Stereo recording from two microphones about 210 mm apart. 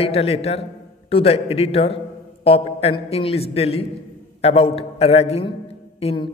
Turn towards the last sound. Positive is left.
turn(degrees=30)  # may be behind; listen again after turning